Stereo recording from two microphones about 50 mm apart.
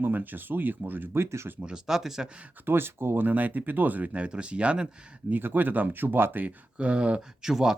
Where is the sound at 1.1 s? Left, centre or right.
Right.